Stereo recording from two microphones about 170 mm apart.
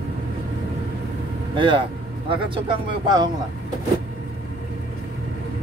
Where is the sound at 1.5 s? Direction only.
30° right (ahead or behind).